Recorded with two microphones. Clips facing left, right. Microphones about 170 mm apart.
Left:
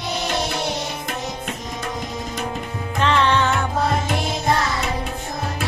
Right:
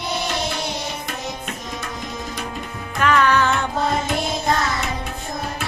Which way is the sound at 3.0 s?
25° left (ahead or behind).